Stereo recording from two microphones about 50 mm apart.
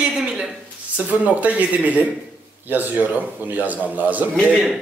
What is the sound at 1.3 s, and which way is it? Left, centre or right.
A man's voice, right.